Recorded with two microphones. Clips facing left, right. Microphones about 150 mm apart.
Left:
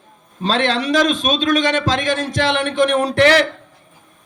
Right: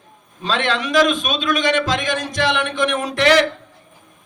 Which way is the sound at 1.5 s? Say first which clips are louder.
Even; 45° left (ahead or behind).